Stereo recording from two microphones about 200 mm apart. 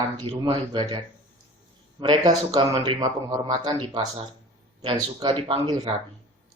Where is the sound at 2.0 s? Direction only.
20° right (ahead or behind).